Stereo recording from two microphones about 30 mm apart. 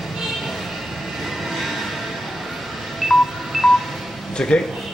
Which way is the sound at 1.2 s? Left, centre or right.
Centre.